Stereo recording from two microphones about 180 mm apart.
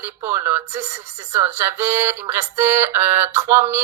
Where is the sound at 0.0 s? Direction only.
15° right (ahead or behind).